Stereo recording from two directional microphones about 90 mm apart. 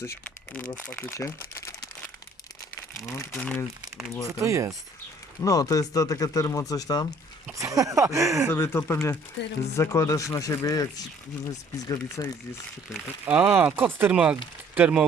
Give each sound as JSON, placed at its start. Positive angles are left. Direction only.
{"t": 0.3, "sound": "speech", "side_deg": 15}
{"t": 1.1, "sound": "crumpling", "side_deg": 35}
{"t": 3.0, "sound": "speech", "side_deg": 30}
{"t": 4.3, "sound": "speech", "side_deg": -35}
{"t": 5.4, "sound": "speech", "side_deg": 40}
{"t": 7.5, "sound": "speech", "side_deg": -40}
{"t": 8.5, "sound": "speech", "side_deg": 30}
{"t": 13.2, "sound": "speech", "side_deg": -15}
{"t": 14.1, "sound": "speech", "side_deg": -15}